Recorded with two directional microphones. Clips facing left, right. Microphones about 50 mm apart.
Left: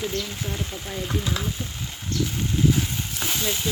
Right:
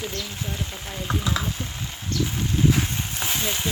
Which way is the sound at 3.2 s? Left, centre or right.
Centre.